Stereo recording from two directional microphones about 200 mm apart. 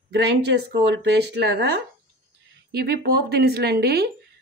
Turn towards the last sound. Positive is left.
turn(degrees=-50)  # may be behind; listen again after turning